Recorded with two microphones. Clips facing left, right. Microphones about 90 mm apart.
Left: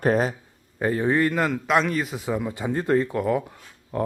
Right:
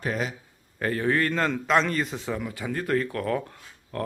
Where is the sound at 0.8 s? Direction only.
20° left (ahead or behind).